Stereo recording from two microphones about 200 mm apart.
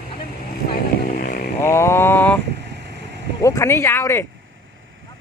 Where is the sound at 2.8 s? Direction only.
60° right (ahead or behind).